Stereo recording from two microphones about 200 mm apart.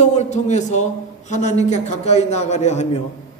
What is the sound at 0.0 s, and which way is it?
A man's voice, 35° left (ahead or behind).